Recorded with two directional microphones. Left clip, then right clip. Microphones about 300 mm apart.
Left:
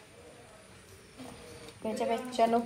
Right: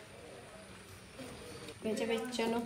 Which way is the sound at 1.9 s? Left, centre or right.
Centre.